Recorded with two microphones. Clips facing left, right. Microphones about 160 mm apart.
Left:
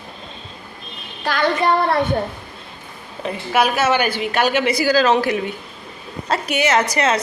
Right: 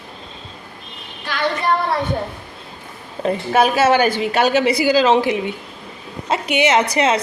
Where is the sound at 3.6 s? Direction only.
30° right (ahead or behind).